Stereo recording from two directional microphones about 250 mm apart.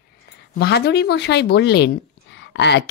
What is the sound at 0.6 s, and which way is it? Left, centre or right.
A woman's voice, left.